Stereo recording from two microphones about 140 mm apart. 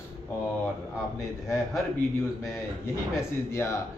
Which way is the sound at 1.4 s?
5° right (ahead or behind).